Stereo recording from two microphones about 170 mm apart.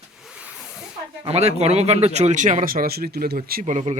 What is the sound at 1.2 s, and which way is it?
Speech, 40° right (ahead or behind).